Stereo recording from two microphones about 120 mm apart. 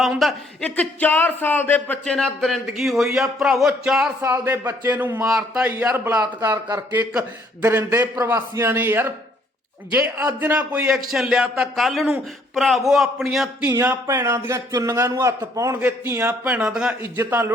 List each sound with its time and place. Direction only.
0.0 s speech: centre (ahead or behind)
0.6 s speech: 10° left (ahead or behind)
2.0 s speech: 5° left (ahead or behind)
4.2 s a man's voice: 20° right (ahead or behind)
5.2 s a man's voice: 5° right (ahead or behind)
6.4 s speech: 35° right (ahead or behind)
6.7 s a man's voice: 15° right (ahead or behind)
14.1 s a man's voice: 25° right (ahead or behind); by 16.9 s 5° right (ahead or behind)
17.0 s a man's voice: 20° right (ahead or behind)